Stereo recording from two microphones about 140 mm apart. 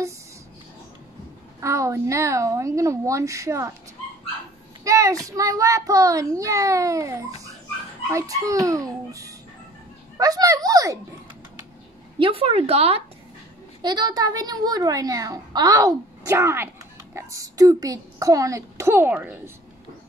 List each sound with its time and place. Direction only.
1.6 s a child's voice: 20° right (ahead or behind)
4.8 s a child's voice: 20° right (ahead or behind)
12.2 s speech: 40° right (ahead or behind)
13.8 s a child's voice: 30° right (ahead or behind); by 19.5 s 15° right (ahead or behind)